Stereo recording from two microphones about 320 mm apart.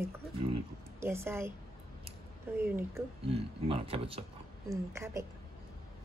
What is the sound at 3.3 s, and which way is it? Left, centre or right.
Speech, centre.